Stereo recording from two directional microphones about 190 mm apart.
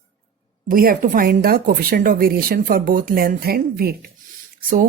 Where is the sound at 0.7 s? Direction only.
50° right (ahead or behind).